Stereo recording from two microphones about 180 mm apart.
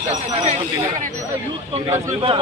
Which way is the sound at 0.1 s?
35° right (ahead or behind).